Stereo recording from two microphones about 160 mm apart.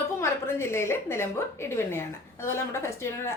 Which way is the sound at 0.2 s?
15° left (ahead or behind).